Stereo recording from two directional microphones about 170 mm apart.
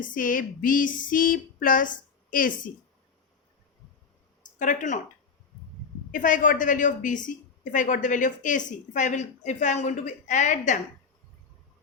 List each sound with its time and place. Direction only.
0.0 s a woman's voice: 50° left (ahead or behind)
4.4 s speech: 50° left (ahead or behind)
6.1 s a woman's voice: 50° left (ahead or behind)